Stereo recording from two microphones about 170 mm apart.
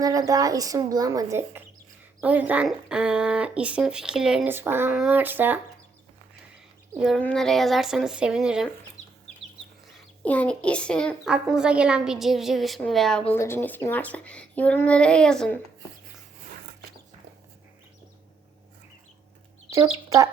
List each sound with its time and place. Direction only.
0.0 s speech: 20° right (ahead or behind)
6.9 s a child's voice: 5° right (ahead or behind)
10.2 s a child's voice: 10° left (ahead or behind)
19.7 s speech: 20° right (ahead or behind)